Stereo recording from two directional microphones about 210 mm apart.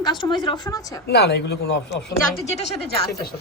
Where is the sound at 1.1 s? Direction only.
55° left (ahead or behind).